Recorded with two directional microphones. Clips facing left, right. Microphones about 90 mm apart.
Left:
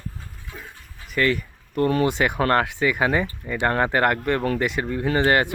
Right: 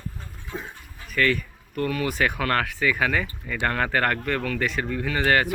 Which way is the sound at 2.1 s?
20° left (ahead or behind).